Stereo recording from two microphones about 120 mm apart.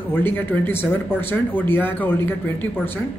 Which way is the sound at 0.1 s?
15° left (ahead or behind).